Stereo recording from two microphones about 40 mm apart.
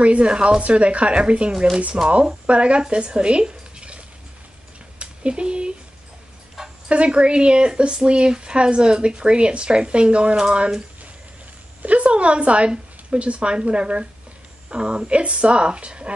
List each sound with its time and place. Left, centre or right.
0.0 s speech: right
4.9 s a sound: right
6.6 s dog: centre
6.9 s speech: right
11.8 s speech: right